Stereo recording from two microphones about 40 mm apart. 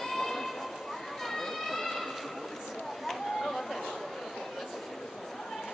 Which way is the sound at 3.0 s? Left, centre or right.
Centre.